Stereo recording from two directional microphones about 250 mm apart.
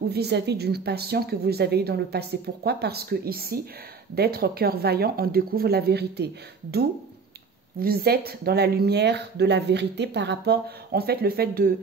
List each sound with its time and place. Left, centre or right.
0.1 s speech: right